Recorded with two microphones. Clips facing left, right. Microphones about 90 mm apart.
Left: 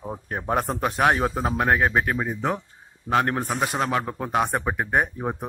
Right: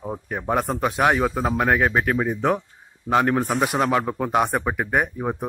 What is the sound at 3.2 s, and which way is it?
Speech, 5° left (ahead or behind).